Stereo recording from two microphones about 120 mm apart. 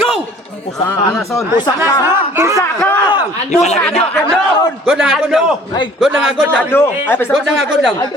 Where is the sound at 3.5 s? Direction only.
70° left (ahead or behind).